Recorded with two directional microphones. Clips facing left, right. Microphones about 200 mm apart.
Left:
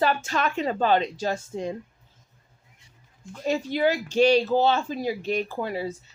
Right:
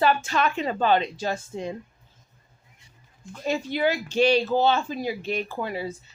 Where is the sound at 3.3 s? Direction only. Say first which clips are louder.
Left 1 dB; 40° left (ahead or behind).